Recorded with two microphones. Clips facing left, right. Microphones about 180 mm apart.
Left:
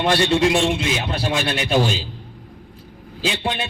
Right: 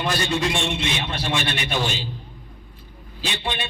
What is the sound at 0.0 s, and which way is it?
Speech, 85° left.